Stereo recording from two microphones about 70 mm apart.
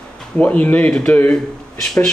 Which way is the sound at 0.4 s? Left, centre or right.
Left.